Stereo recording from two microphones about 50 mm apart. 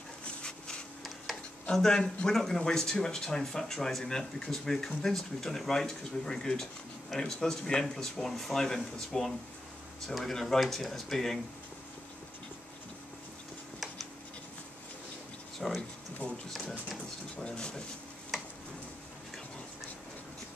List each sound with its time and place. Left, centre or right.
0.2 s dog: centre
1.7 s speech: centre
15.6 s speech: centre
17.4 s speech: centre